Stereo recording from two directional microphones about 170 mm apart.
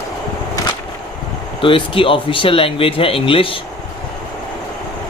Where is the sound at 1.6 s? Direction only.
30° left (ahead or behind).